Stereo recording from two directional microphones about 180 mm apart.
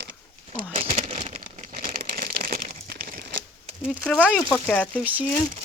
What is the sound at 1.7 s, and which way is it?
Crumpling, 55° right (ahead or behind).